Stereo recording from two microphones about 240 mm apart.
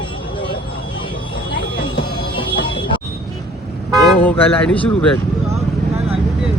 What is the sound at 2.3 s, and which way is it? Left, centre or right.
Music, centre.